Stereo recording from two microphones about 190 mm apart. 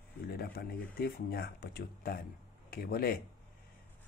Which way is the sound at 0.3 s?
55° left (ahead or behind).